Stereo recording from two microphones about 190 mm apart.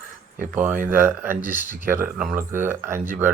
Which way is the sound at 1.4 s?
40° left (ahead or behind).